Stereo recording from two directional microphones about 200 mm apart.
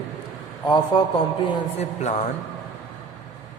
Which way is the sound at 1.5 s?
35° left (ahead or behind).